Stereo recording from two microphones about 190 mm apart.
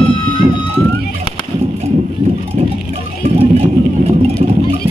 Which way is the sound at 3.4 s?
30° right (ahead or behind).